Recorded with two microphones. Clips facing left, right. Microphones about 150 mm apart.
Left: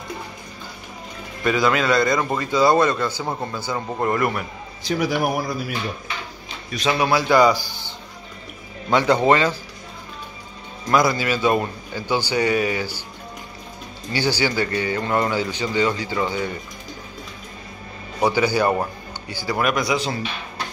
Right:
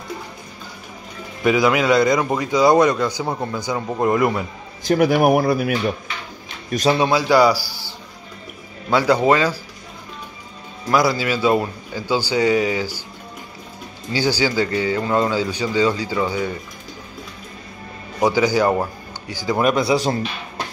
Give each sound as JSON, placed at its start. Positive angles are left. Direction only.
{"t": 1.4, "sound": "a man's voice", "side_deg": -15}
{"t": 4.8, "sound": "speech", "side_deg": -55}
{"t": 6.7, "sound": "a man's voice", "side_deg": -40}
{"t": 7.0, "sound": "a man's voice", "side_deg": -15}
{"t": 9.0, "sound": "a man's voice", "side_deg": -10}
{"t": 10.9, "sound": "a man's voice", "side_deg": -10}
{"t": 14.1, "sound": "a man's voice", "side_deg": -10}
{"t": 18.2, "sound": "speech", "side_deg": -10}
{"t": 19.6, "sound": "a man's voice", "side_deg": -30}